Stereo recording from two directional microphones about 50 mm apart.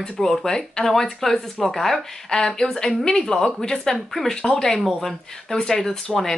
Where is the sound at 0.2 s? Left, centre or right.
Centre.